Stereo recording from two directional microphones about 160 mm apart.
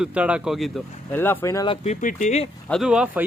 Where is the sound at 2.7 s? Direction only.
5° right (ahead or behind).